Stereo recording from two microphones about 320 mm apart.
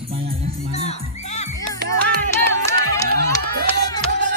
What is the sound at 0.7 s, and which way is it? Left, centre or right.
Speech, centre.